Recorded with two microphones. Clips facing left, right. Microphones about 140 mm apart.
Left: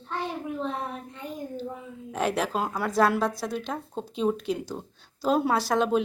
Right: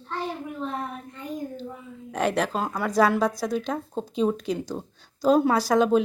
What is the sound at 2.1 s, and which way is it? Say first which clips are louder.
A woman's voice: right 2 dB; centre (ahead or behind).